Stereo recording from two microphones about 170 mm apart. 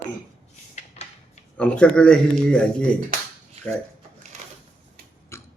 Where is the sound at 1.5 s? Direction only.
5° left (ahead or behind).